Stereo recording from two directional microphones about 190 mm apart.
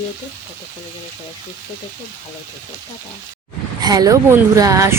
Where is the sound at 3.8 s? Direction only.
20° right (ahead or behind).